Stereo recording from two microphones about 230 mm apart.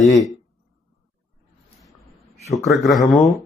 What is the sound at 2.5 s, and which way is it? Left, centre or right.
Speech, centre.